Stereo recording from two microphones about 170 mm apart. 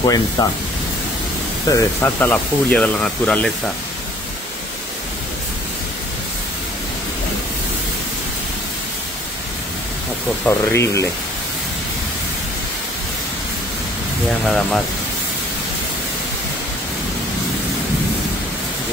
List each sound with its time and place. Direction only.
0.0 s speech: 20° left (ahead or behind)
1.7 s speech: 15° left (ahead or behind)
10.4 s speech: 15° left (ahead or behind)
14.4 s speech: centre (ahead or behind)